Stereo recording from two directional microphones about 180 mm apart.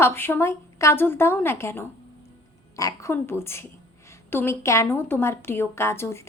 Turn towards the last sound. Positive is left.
turn(degrees=15)  # may be behind; listen again after turning